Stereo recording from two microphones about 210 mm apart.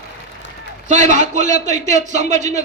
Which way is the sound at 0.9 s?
35° right (ahead or behind).